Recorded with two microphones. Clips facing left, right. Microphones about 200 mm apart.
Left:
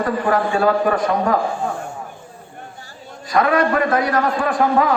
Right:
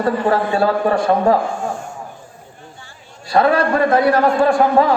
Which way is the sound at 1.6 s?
60° left (ahead or behind).